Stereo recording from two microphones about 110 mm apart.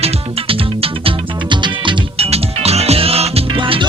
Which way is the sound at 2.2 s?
70° right (ahead or behind).